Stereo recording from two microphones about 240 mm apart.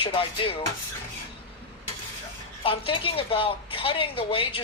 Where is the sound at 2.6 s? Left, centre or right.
Left.